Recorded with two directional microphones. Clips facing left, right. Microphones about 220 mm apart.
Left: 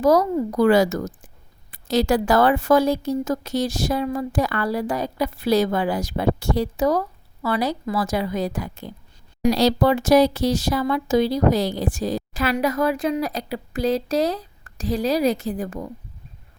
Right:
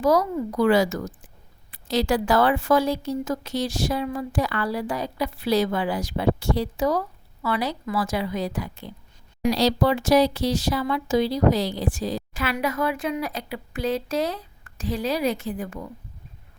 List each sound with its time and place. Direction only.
0.0 s a woman's voice: 40° left (ahead or behind)